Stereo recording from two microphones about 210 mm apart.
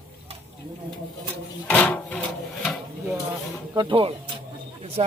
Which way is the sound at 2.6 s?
Centre (ahead or behind).